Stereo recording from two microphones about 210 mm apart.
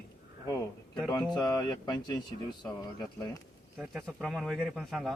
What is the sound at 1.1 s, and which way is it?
Speech, 20° left (ahead or behind).